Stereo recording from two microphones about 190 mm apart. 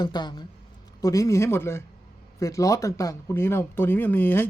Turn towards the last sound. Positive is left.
turn(degrees=10)  # may be behind; listen again after turning